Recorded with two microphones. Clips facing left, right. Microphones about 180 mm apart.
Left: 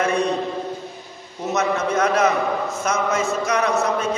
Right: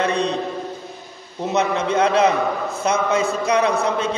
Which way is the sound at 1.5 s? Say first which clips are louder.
Right 1 dB; 30° right (ahead or behind).